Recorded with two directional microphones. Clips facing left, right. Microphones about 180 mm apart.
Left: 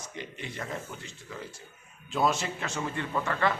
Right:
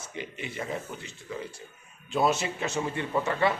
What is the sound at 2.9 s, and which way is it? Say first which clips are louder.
Speech: right 3 dB; 20° right (ahead or behind).